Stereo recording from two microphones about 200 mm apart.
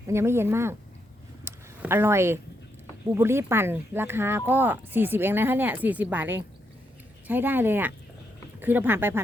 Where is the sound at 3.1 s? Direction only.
10° right (ahead or behind).